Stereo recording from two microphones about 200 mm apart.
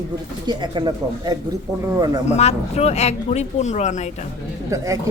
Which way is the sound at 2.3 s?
35° left (ahead or behind).